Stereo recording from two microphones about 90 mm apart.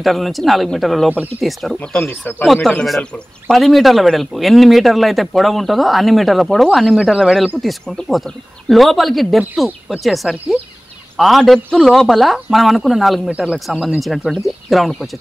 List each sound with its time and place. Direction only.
0.0 s speech: centre (ahead or behind)
2.0 s speech: 20° left (ahead or behind)
2.4 s speech: centre (ahead or behind)
8.6 s speech: centre (ahead or behind)